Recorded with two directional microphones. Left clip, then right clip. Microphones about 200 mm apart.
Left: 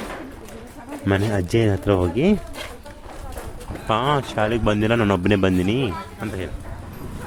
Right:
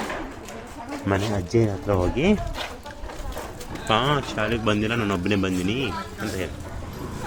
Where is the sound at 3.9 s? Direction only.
35° left (ahead or behind).